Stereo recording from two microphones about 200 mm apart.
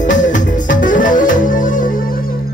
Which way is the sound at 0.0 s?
40° left (ahead or behind).